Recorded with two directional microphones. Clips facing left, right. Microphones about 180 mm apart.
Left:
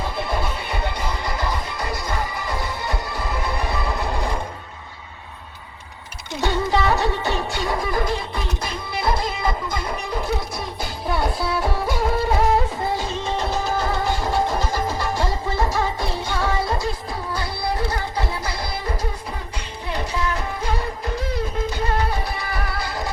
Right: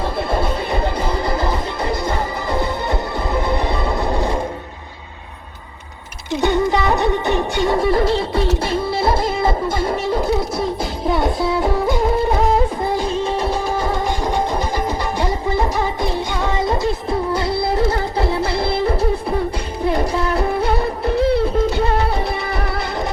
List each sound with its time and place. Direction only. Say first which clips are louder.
1.3 s music: right 6 dB; 30° right (ahead or behind)
6.4 s music: right 4 dB; 15° right (ahead or behind)
13.5 s music: right 3 dB; 15° right (ahead or behind); by 21.3 s 30° right (ahead or behind)